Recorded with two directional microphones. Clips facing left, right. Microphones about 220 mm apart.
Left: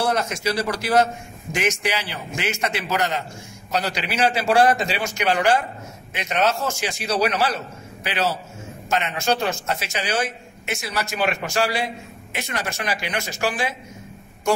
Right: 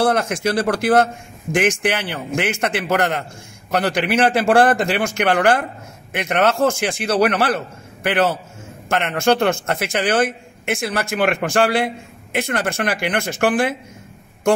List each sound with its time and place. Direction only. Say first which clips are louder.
0.0 s speech: right 5 dB; 55° right (ahead or behind)